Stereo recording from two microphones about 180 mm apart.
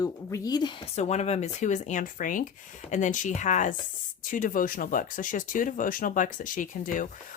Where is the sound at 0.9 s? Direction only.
40° left (ahead or behind).